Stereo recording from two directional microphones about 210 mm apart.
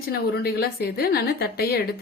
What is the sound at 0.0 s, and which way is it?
A woman's voice, 45° left (ahead or behind).